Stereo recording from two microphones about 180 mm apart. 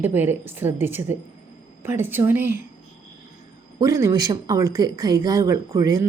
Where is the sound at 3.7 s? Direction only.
20° right (ahead or behind).